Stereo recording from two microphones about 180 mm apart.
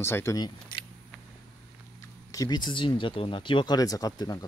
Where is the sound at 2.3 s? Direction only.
20° left (ahead or behind).